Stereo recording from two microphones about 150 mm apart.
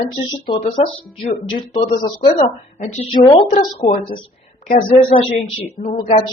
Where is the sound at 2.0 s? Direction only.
30° left (ahead or behind).